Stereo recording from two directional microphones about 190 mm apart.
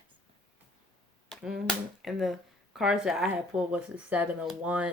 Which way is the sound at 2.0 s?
Centre (ahead or behind).